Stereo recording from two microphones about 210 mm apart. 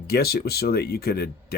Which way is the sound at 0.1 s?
50° left (ahead or behind).